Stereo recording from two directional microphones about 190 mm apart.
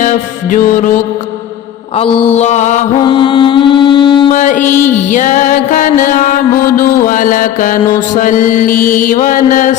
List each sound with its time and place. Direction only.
0.0 s music: 40° left (ahead or behind)
2.0 s mantra: 30° left (ahead or behind)
3.0 s music: 25° left (ahead or behind)
4.4 s music: 40° left (ahead or behind)
4.6 s music: 10° left (ahead or behind)
5.1 s mantra: 40° left (ahead or behind)